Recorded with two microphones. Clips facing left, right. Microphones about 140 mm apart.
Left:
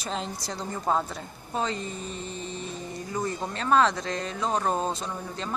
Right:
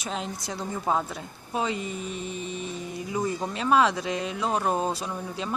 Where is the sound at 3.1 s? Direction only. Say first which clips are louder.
Right 2 dB; 10° right (ahead or behind).